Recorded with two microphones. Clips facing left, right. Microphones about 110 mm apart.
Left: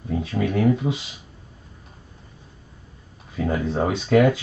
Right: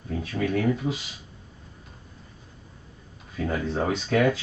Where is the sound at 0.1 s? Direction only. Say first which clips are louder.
Left 3 dB; 25° left (ahead or behind).